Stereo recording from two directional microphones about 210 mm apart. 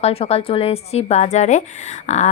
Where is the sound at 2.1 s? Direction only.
35° left (ahead or behind).